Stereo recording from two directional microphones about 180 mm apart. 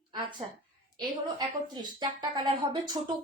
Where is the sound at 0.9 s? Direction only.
25° right (ahead or behind).